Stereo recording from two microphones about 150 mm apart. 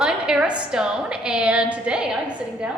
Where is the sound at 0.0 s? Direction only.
5° right (ahead or behind).